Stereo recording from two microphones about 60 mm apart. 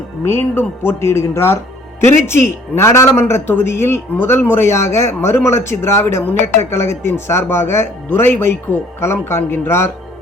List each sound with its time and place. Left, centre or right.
0.3 s speech: left